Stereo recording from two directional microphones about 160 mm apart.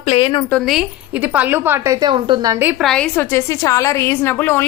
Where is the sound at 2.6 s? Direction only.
10° right (ahead or behind).